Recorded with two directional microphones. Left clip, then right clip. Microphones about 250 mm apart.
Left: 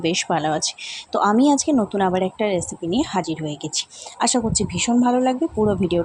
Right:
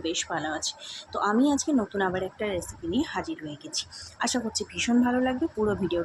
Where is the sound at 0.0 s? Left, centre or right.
Left.